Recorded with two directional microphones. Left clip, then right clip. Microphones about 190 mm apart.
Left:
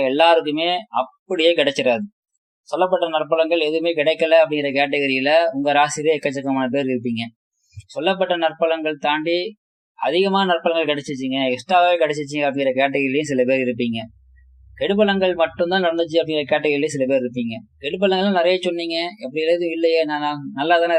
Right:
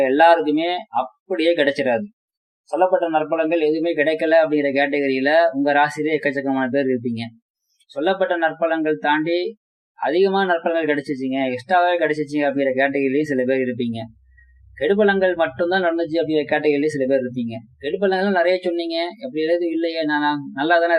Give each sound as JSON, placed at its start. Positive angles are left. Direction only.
{"t": 0.0, "sound": "speech", "side_deg": 40}
{"t": 2.6, "sound": "speech", "side_deg": 50}
{"t": 13.7, "sound": "speech", "side_deg": -5}
{"t": 14.8, "sound": "speech", "side_deg": 35}